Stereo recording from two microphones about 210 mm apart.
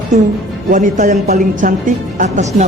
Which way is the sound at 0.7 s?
40° right (ahead or behind).